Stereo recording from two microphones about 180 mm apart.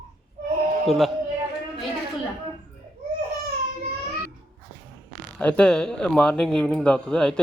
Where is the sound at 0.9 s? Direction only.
Centre (ahead or behind).